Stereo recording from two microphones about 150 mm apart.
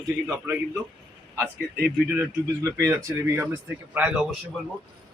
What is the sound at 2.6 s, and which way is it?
Speech, 20° right (ahead or behind).